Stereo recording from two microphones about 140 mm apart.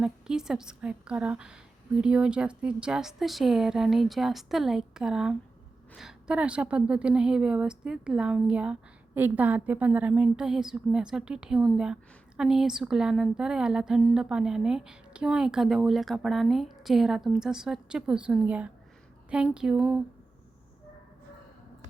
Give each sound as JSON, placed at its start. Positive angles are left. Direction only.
{"t": 0.0, "sound": "a woman's voice", "side_deg": -5}